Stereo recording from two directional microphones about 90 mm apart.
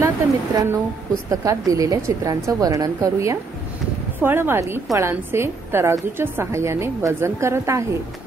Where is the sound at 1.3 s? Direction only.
40° right (ahead or behind).